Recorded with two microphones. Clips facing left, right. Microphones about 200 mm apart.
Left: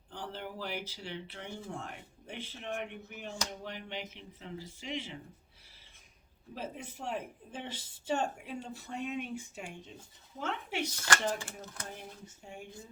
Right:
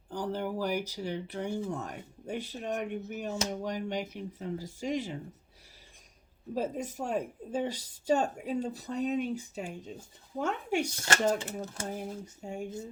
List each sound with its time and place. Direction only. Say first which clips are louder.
0.1 s speech: right 9 dB; 45° right (ahead or behind)
6.5 s speech: right 9 dB; 40° right (ahead or behind)
10.9 s speech: right 2 dB; 25° right (ahead or behind)
11.9 s speech: right 9 dB; 45° right (ahead or behind)